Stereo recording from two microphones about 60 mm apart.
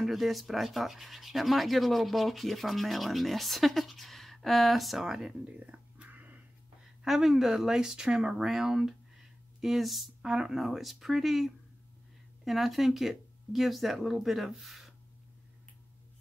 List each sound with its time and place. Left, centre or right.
0.0 s speech: centre
5.4 s a sound: right
7.1 s speech: centre
10.2 s speech: centre